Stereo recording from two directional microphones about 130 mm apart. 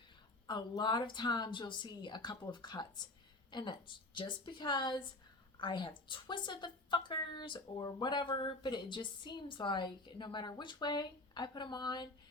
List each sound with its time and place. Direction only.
0.4 s a woman's voice: 35° left (ahead or behind)